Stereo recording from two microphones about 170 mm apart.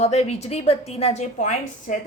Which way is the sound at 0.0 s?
40° left (ahead or behind).